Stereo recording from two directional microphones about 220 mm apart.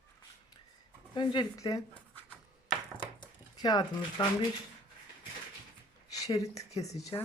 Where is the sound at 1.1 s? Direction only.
20° left (ahead or behind).